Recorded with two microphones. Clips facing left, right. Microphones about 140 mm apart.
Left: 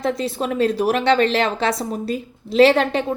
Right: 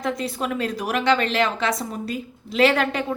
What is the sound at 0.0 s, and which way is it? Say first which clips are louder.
A woman's voice: left 4 dB; 30° left (ahead or behind).